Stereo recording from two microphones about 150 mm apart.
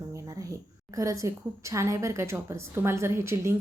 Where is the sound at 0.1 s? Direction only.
25° right (ahead or behind).